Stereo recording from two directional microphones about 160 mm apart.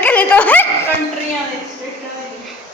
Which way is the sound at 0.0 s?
10° left (ahead or behind).